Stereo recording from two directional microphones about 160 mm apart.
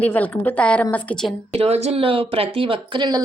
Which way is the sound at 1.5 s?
40° right (ahead or behind).